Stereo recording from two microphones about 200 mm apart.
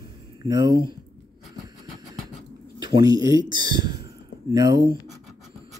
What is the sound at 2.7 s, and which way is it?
Speech, 20° right (ahead or behind).